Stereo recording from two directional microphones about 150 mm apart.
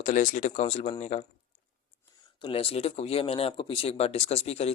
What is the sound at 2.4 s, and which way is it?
Speech, 40° left (ahead or behind).